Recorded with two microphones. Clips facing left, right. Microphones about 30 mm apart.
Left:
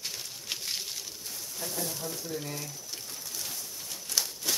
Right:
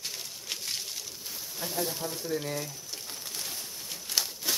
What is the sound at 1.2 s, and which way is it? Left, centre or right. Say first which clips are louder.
Speech: right 1 dB; centre.